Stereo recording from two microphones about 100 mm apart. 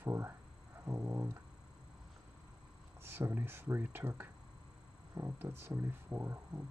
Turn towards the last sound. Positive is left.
turn(degrees=-20)  # may be behind; listen again after turning